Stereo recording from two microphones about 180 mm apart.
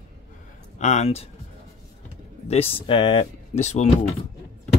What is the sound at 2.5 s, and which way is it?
Speech, 30° left (ahead or behind).